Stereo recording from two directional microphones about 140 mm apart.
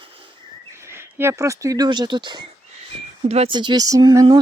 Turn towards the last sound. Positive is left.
turn(degrees=-30)  # may be behind; listen again after turning